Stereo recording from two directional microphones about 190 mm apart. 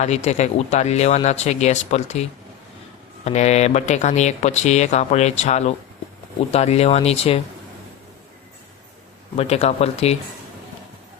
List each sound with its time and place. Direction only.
0.0 s speech: 35° left (ahead or behind)
3.2 s speech: 35° left (ahead or behind)
9.3 s speech: 35° left (ahead or behind)